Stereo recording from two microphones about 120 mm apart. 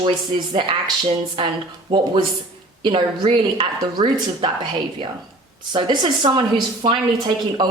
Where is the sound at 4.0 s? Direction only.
70° right (ahead or behind).